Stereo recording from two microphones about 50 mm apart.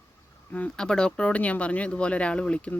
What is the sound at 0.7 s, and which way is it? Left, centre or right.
Speech, centre.